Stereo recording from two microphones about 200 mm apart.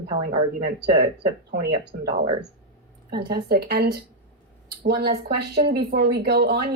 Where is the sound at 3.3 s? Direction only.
50° right (ahead or behind).